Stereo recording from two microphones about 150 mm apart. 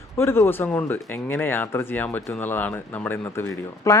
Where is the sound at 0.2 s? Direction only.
15° left (ahead or behind).